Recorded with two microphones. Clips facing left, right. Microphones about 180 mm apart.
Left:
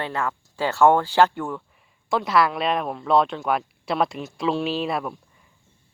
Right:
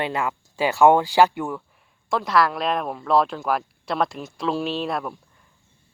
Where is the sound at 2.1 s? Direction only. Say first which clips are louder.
Even; centre (ahead or behind).